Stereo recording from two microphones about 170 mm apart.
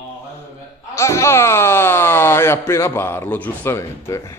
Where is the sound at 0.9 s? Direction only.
15° left (ahead or behind).